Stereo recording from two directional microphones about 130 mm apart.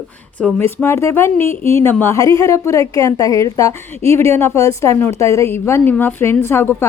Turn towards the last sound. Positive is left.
turn(degrees=20)  # may be behind; listen again after turning